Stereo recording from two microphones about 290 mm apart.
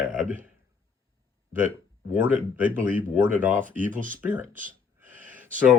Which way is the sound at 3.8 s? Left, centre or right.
Right.